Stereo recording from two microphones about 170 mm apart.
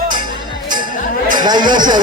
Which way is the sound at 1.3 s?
25° right (ahead or behind).